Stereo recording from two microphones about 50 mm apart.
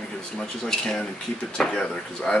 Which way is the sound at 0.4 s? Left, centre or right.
Centre.